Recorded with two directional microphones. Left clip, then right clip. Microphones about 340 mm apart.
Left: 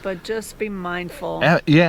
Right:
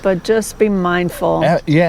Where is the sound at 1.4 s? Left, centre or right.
Left.